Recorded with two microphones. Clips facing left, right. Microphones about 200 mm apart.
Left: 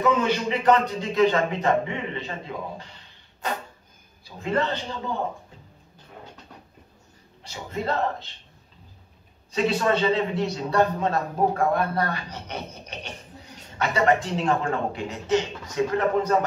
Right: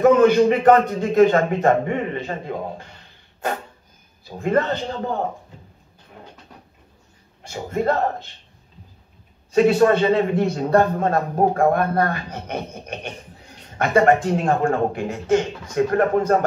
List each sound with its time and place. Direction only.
0.0 s a man's voice: 50° right (ahead or behind)
7.4 s a man's voice: 50° right (ahead or behind)
9.5 s a man's voice: 50° right (ahead or behind)